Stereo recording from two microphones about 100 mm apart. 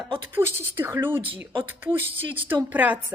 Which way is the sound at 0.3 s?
20° right (ahead or behind).